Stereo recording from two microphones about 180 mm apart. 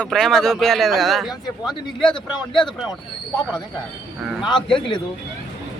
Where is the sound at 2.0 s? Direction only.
25° left (ahead or behind).